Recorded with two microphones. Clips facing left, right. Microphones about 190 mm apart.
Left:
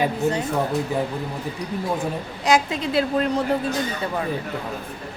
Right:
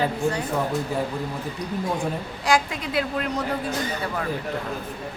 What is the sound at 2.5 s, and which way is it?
Speech, 25° left (ahead or behind).